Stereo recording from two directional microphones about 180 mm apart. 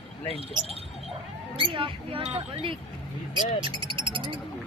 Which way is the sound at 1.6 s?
30° right (ahead or behind).